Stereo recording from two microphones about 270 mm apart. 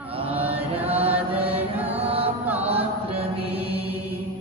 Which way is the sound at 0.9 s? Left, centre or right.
Right.